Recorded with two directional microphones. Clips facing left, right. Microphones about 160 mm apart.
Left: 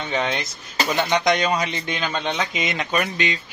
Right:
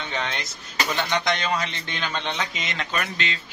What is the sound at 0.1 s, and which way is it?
Speech, 15° left (ahead or behind).